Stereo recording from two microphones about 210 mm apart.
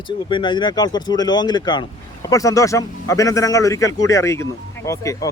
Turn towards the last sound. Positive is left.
turn(degrees=15)  # may be behind; listen again after turning